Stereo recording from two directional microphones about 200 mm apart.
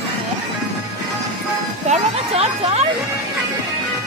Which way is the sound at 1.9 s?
30° right (ahead or behind).